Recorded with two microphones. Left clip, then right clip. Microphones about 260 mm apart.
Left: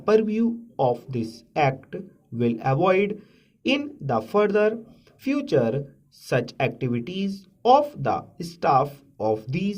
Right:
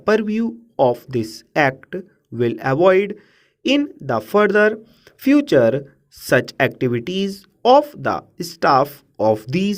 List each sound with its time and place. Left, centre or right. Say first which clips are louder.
0.0 s speech: right 2 dB; right